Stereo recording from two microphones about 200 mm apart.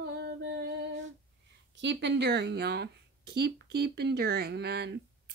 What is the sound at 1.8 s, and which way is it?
Speech, 60° right (ahead or behind).